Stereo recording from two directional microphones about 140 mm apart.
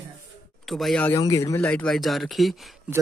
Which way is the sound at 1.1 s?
25° left (ahead or behind).